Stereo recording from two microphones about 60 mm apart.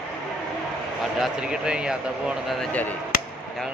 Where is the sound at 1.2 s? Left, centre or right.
Centre.